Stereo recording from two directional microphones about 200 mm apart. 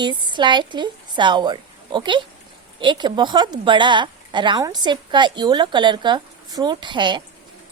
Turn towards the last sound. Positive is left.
turn(degrees=-25)  # may be behind; listen again after turning